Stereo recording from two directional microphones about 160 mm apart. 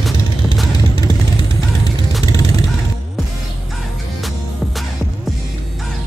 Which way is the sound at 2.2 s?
25° left (ahead or behind).